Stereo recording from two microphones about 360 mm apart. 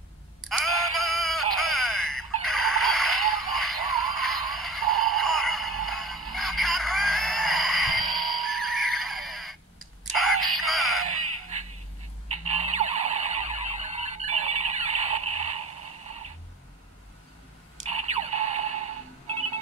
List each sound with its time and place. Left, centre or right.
0.5 s synthetic singing: centre
10.1 s music: centre
12.4 s car alarm: centre
17.7 s a sound: centre